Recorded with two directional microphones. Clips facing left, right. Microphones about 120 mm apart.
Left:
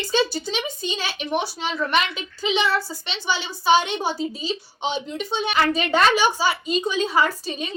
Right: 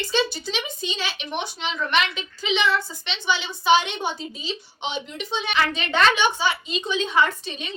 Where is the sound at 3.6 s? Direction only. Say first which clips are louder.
Left 1 dB; 35° left (ahead or behind).